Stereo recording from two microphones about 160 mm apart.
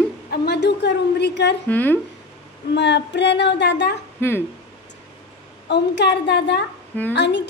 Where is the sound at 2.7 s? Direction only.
90° left.